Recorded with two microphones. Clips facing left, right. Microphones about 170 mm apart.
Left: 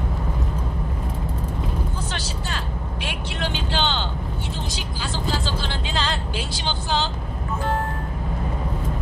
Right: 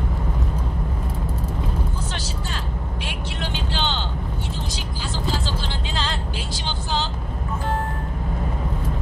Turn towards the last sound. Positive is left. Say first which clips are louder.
# left 2 dB
turn(degrees=70)  # may be behind; listen again after turning